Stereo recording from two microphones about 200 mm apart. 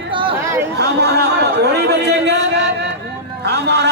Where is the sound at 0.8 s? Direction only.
55° right (ahead or behind).